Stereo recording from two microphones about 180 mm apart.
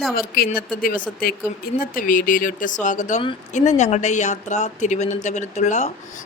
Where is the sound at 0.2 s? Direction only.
55° left (ahead or behind).